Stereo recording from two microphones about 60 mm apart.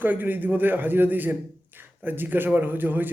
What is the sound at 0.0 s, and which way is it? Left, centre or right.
A man's voice, right.